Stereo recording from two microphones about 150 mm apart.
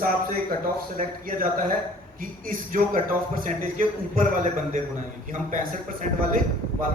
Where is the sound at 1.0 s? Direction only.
65° right (ahead or behind).